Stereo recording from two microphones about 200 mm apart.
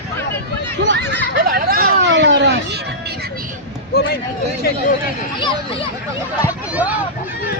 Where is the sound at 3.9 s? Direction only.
55° left (ahead or behind).